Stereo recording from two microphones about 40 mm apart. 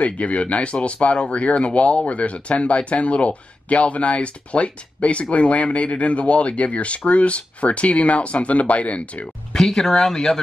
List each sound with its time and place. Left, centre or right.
0.0 s speech: left
9.5 s speech: centre